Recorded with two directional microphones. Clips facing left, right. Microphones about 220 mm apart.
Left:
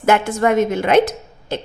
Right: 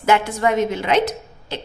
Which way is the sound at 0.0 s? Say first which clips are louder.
Left 2 dB; 50° left (ahead or behind).